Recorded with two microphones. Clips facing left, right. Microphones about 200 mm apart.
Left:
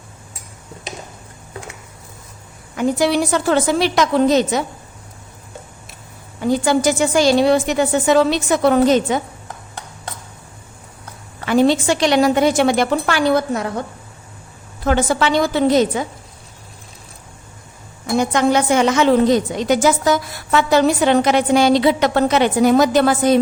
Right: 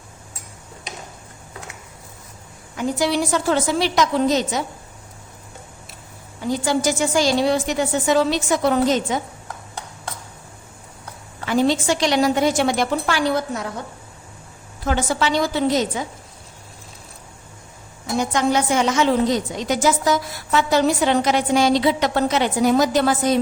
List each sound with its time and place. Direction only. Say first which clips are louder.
2.7 s a woman's voice: left 4 dB; 60° left (ahead or behind)
6.4 s a woman's voice: left 5 dB; 60° left (ahead or behind)
11.4 s a woman's voice: left 4 dB; 65° left (ahead or behind)
14.8 s a woman's voice: left 4 dB; 60° left (ahead or behind)
18.2 s a woman's voice: left 4 dB; 60° left (ahead or behind)